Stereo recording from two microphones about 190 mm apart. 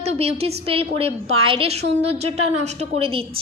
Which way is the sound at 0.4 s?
30° right (ahead or behind).